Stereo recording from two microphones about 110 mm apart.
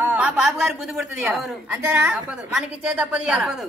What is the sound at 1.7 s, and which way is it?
A woman's voice, 20° right (ahead or behind).